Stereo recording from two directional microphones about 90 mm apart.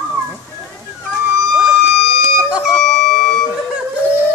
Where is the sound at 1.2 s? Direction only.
10° right (ahead or behind).